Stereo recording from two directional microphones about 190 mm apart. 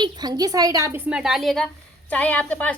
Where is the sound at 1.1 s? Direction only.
Centre (ahead or behind).